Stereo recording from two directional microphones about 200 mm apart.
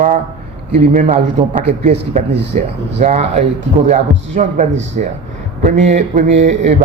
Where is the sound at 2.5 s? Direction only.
40° right (ahead or behind).